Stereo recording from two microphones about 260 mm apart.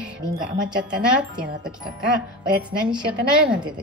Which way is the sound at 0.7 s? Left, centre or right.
Centre.